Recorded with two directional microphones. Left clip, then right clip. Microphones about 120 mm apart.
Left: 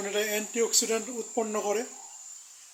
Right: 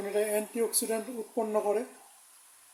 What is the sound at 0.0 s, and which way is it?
Speech, 5° right (ahead or behind).